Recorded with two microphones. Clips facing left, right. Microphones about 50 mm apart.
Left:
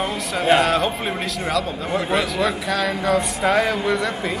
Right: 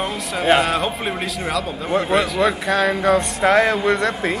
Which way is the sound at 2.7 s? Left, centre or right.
Right.